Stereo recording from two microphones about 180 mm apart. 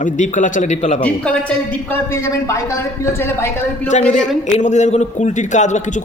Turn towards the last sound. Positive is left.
turn(degrees=40)  # may be behind; listen again after turning